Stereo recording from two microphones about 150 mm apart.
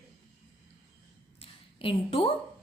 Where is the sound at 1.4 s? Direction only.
40° left (ahead or behind).